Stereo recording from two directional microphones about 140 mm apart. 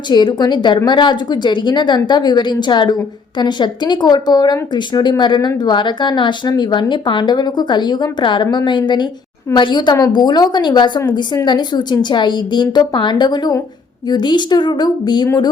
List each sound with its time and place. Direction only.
0.1 s a woman's voice: 30° left (ahead or behind)